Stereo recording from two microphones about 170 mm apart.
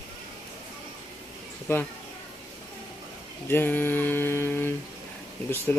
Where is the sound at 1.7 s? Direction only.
15° left (ahead or behind).